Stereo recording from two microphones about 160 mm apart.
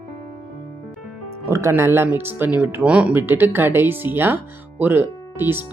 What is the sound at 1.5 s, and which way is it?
Speech, 15° right (ahead or behind).